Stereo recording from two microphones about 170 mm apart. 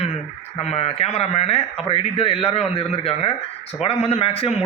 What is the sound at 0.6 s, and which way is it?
A man's voice, 40° left (ahead or behind).